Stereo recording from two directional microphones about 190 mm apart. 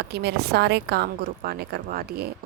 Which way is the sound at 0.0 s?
60° right (ahead or behind).